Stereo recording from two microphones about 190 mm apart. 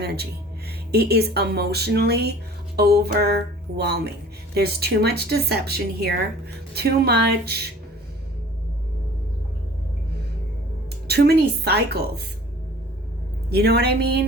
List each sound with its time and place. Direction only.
0.0 s speech: 55° right (ahead or behind)
11.1 s speech: 55° right (ahead or behind)
13.5 s speech: 55° right (ahead or behind)